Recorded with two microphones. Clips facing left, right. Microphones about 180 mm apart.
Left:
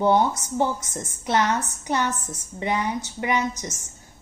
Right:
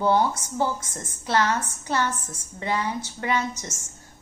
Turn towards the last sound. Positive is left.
turn(degrees=15)  # may be behind; listen again after turning